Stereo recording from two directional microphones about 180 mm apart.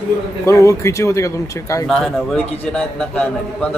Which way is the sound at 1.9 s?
5° left (ahead or behind).